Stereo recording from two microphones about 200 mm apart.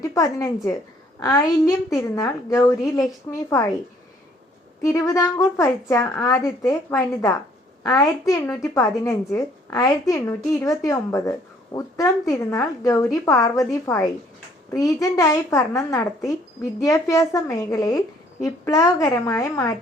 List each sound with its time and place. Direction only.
0.0 s a woman's voice: 15° left (ahead or behind)
4.8 s a woman's voice: 15° left (ahead or behind)